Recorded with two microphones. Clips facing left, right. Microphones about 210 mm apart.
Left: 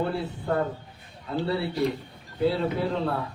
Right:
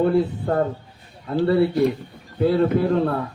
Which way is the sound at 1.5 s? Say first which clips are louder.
Right 9 dB; 55° right (ahead or behind).